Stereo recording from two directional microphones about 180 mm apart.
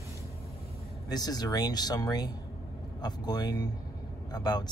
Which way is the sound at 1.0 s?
20° left (ahead or behind).